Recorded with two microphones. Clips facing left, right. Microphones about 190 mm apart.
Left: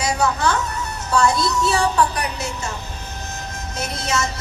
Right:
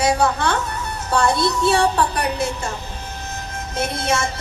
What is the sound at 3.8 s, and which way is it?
Speech, 55° right (ahead or behind).